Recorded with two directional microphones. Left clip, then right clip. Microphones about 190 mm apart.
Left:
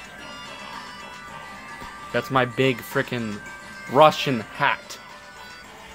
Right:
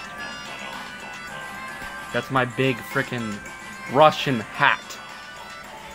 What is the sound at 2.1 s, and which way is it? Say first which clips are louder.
Speech: left 1 dB; 20° left (ahead or behind).